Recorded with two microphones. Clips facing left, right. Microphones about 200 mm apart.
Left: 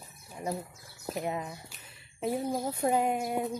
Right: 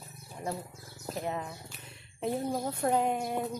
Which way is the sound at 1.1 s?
10° left (ahead or behind).